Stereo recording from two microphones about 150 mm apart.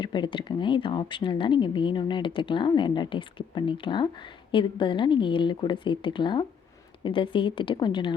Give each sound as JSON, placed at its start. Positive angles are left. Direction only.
{"t": 0.0, "sound": "speech", "side_deg": 30}